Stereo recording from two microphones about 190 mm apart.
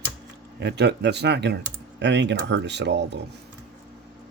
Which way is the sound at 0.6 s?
65° right (ahead or behind).